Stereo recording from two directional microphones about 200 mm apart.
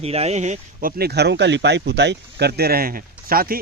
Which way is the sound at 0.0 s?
30° right (ahead or behind).